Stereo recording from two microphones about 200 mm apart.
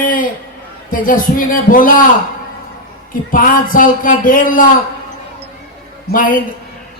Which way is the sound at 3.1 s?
45° left (ahead or behind).